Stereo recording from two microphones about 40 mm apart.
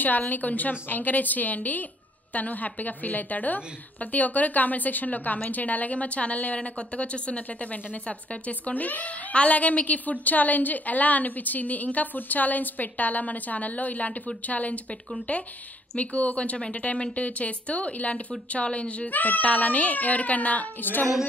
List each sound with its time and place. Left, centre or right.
0.0 s a woman's voice: left
16.0 s speech: left
19.0 s speech: left
20.8 s a woman's voice: left